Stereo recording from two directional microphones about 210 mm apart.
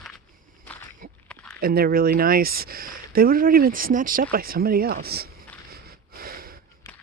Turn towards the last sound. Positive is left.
turn(degrees=-45)  # may be behind; listen again after turning